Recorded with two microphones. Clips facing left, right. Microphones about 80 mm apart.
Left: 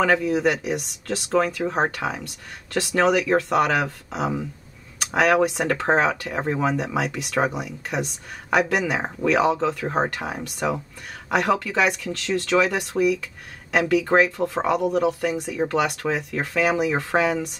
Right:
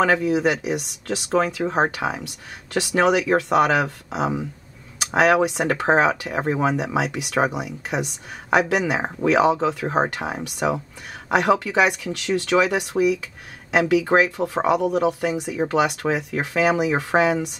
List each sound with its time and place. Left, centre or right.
0.0 s speech: centre